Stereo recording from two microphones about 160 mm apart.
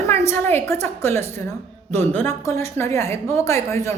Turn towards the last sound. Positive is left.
turn(degrees=20)  # may be behind; listen again after turning